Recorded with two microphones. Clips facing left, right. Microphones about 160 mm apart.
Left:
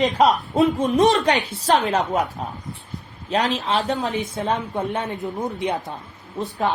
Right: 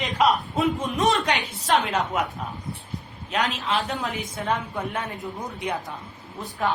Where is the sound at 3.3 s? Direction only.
35° left (ahead or behind).